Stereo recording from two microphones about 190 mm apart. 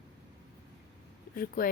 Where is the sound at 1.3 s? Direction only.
50° left (ahead or behind).